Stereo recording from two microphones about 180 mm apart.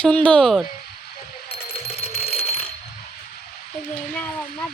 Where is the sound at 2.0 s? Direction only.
35° left (ahead or behind).